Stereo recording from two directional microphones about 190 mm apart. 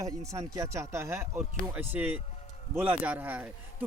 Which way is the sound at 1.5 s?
Centre (ahead or behind).